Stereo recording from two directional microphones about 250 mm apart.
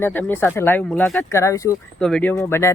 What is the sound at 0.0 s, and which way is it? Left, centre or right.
Speech, centre.